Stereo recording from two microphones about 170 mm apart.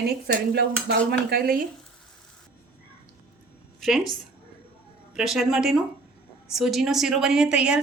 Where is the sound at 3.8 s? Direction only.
Centre (ahead or behind).